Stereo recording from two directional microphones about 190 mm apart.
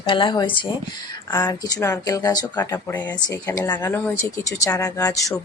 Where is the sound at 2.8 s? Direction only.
10° left (ahead or behind).